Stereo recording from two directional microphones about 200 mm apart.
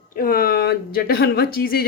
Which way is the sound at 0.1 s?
45° left (ahead or behind).